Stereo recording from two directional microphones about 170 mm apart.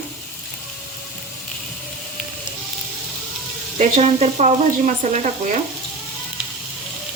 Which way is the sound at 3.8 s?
40° right (ahead or behind).